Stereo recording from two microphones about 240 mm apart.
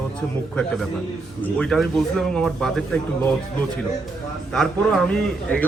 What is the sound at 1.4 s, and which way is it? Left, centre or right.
A man's voice, centre.